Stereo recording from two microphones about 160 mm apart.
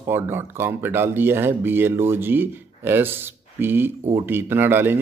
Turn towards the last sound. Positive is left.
turn(degrees=-15)  # may be behind; listen again after turning